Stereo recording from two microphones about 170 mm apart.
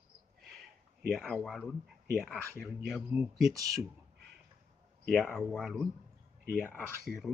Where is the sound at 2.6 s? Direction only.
5° right (ahead or behind).